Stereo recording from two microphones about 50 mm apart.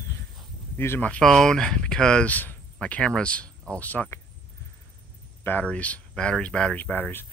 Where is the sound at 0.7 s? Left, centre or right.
Left.